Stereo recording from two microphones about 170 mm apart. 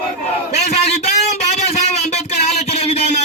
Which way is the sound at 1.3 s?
40° left (ahead or behind).